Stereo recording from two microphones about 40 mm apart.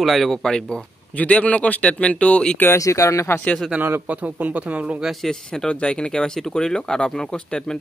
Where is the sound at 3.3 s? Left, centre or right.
Left.